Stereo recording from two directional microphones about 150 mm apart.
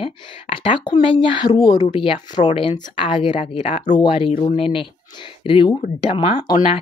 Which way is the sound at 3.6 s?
50° left (ahead or behind).